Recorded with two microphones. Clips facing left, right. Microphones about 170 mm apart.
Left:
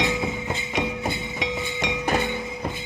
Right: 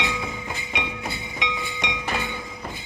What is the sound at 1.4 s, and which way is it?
Music, 35° left (ahead or behind).